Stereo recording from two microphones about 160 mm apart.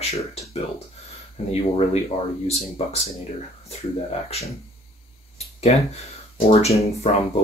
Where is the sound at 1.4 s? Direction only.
40° left (ahead or behind).